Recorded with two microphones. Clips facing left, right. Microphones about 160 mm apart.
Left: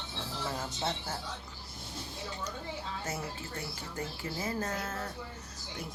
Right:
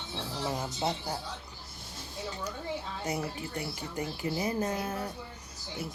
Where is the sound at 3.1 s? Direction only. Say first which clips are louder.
Right 4 dB; 15° right (ahead or behind).